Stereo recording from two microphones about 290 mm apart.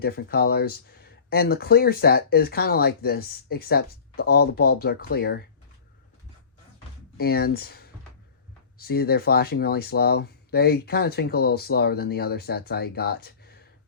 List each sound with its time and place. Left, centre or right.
0.0 s speech: left
7.2 s speech: left